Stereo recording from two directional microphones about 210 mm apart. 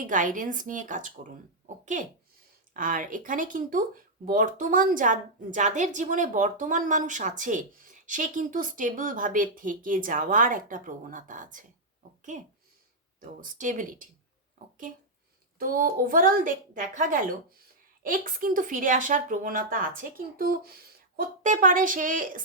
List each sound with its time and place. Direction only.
0.1 s a woman's voice: 40° right (ahead or behind)
15.5 s a woman's voice: 45° right (ahead or behind)